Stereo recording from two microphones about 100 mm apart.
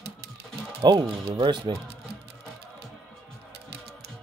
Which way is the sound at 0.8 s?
45° right (ahead or behind).